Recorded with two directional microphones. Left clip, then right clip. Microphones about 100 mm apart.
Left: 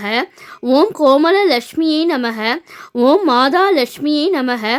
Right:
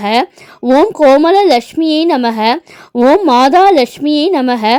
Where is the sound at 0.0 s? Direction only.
45° right (ahead or behind).